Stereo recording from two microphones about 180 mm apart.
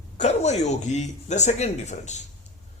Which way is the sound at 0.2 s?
40° left (ahead or behind).